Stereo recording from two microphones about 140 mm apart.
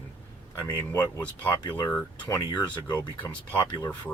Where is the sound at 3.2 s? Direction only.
10° left (ahead or behind).